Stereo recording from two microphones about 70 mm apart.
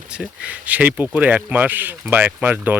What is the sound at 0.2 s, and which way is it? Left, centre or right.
Speech, right.